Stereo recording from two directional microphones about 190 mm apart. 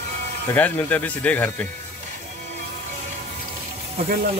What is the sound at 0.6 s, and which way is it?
Speech, 10° left (ahead or behind).